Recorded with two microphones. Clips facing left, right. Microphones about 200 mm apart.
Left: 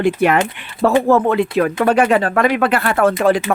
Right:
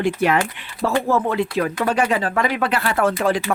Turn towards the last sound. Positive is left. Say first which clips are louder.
# left 5 dB
turn(degrees=60)  # may be behind; listen again after turning